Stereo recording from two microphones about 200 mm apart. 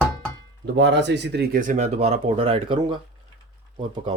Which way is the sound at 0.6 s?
60° right (ahead or behind).